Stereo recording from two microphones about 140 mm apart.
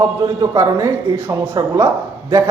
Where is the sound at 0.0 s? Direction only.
25° right (ahead or behind).